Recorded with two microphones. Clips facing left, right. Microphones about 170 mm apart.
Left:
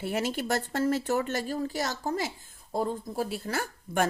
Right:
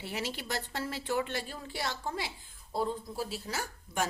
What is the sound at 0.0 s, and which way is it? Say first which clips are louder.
A woman's voice: left 8 dB; 50° left (ahead or behind).